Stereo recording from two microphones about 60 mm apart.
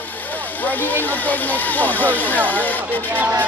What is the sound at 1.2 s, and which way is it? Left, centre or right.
Speech, left.